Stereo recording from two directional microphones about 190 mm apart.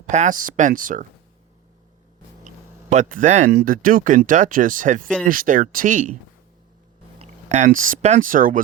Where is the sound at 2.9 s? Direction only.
40° right (ahead or behind).